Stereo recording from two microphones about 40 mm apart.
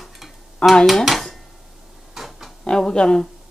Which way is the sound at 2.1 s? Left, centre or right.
Centre.